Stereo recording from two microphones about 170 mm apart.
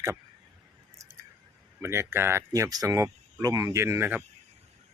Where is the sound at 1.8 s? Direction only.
15° right (ahead or behind).